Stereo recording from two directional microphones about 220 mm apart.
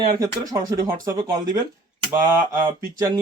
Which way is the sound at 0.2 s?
15° right (ahead or behind).